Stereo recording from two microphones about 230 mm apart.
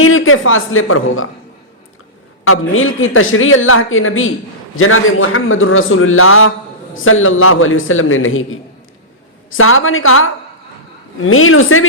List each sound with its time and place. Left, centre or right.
0.0 s speech: left
2.5 s a man's voice: left